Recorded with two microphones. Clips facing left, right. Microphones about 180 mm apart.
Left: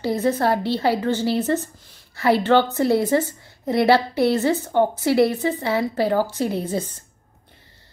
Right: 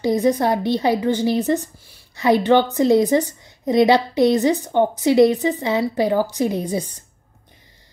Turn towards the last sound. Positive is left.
turn(degrees=-15)  # may be behind; listen again after turning